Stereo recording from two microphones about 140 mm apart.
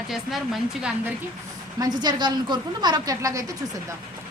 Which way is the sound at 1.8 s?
30° right (ahead or behind).